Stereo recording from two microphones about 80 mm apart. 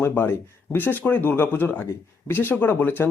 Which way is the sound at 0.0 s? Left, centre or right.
Left.